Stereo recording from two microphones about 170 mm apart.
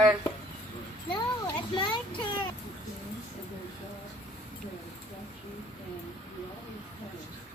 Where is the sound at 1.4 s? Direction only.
30° left (ahead or behind).